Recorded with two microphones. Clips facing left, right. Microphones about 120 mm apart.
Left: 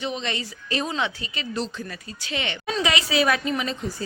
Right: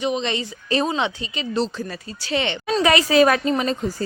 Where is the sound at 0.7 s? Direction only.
35° right (ahead or behind).